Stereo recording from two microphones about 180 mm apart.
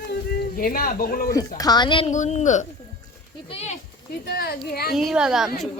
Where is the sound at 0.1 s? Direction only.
55° left (ahead or behind).